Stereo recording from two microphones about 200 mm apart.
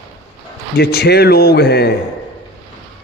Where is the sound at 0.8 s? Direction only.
55° left (ahead or behind).